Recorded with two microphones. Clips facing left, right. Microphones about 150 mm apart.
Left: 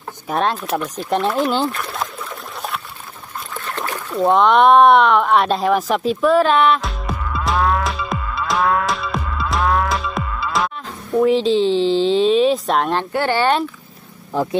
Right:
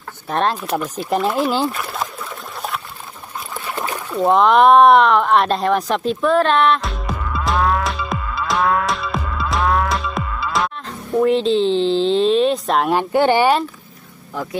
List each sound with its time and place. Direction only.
0.3 s a sound: centre (ahead or behind)
3.5 s rowboat: 10° right (ahead or behind)
12.9 s speech: 20° right (ahead or behind)
14.3 s speech: 30° left (ahead or behind)